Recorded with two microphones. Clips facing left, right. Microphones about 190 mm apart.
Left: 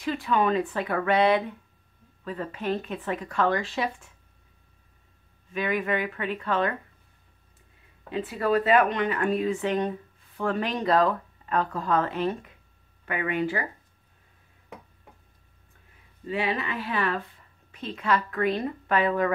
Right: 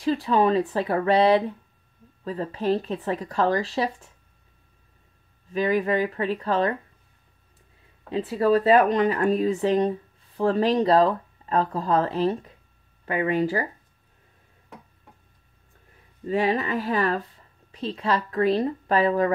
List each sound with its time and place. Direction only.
0.0 s speech: 35° right (ahead or behind)
5.5 s speech: 35° right (ahead or behind)
8.1 s speech: 35° right (ahead or behind)
16.3 s speech: 40° right (ahead or behind)